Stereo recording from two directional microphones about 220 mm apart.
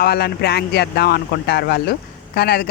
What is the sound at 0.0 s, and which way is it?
Speech, 45° left (ahead or behind).